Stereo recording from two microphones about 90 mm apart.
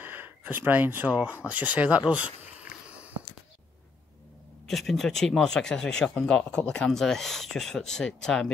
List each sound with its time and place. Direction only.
0.0 s speech: 20° right (ahead or behind)
1.5 s a sound: 15° right (ahead or behind)
4.6 s speech: 5° left (ahead or behind)